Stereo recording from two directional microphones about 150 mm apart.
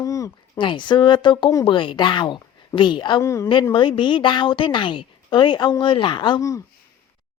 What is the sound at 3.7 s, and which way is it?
Speech, 30° left (ahead or behind).